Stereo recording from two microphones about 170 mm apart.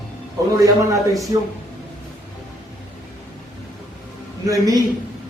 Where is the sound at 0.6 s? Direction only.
20° right (ahead or behind).